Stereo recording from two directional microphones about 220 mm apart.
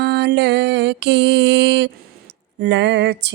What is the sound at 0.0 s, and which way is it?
Mantra, 50° right (ahead or behind).